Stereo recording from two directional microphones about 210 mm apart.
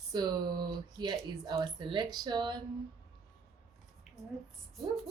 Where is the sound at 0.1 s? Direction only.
20° right (ahead or behind).